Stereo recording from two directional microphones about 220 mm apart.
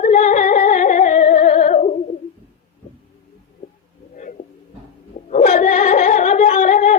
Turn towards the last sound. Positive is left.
turn(degrees=35)  # may be behind; listen again after turning